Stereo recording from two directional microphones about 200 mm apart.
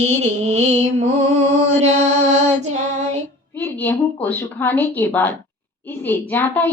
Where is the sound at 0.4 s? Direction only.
35° right (ahead or behind).